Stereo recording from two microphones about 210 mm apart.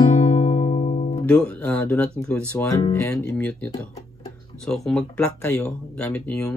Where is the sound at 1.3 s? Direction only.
5° left (ahead or behind).